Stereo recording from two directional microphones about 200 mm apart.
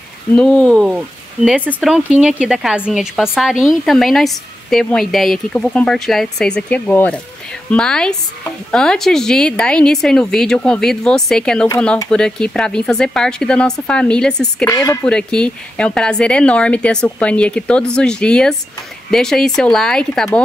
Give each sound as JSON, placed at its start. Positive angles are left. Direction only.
{"t": 0.4, "sound": "speech", "side_deg": 5}